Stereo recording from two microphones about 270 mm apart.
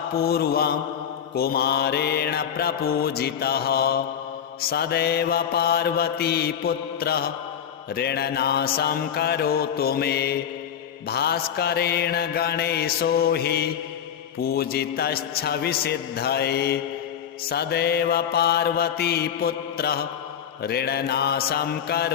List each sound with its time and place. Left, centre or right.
0.2 s mantra: left